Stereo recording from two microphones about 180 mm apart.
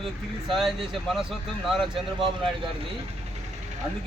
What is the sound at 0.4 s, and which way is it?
Speech, centre (ahead or behind).